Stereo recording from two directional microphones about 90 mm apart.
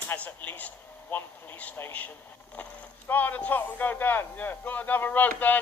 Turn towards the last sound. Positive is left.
turn(degrees=20)  # may be behind; listen again after turning